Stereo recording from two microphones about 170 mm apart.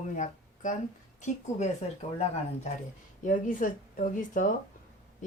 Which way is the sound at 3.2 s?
50° left (ahead or behind).